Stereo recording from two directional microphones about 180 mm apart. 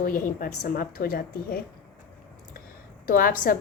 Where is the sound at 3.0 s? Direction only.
55° left (ahead or behind).